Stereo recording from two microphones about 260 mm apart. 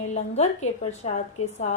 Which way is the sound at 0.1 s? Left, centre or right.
Left.